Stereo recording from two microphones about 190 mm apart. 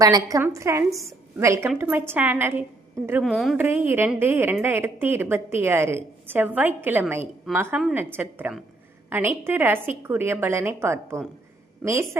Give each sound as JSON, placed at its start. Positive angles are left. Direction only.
{"t": 0.0, "sound": "a woman's voice", "side_deg": -20}
{"t": 3.2, "sound": "speech", "side_deg": 0}
{"t": 3.6, "sound": "a woman's voice", "side_deg": -10}